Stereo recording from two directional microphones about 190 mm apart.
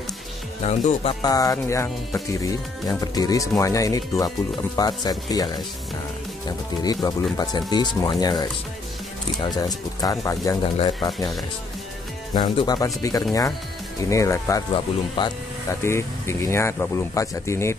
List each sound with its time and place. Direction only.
0.7 s speech: 35° left (ahead or behind)
1.2 s speech: 20° left (ahead or behind)
9.6 s speech: 20° left (ahead or behind)
12.4 s speech: 20° left (ahead or behind)